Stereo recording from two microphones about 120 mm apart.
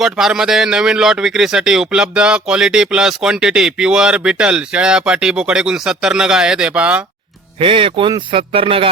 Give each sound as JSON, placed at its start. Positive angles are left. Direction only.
{"t": 0.0, "sound": "a man's voice", "side_deg": -5}
{"t": 7.6, "sound": "speech", "side_deg": -50}